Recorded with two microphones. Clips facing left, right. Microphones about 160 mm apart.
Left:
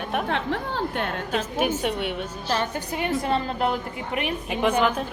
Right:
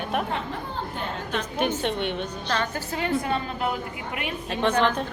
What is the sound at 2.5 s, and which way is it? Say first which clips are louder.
A woman's voice: left 2 dB; 30° left (ahead or behind).